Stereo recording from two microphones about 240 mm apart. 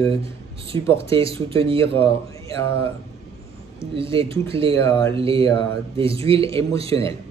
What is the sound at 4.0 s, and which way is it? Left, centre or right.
Speech, right.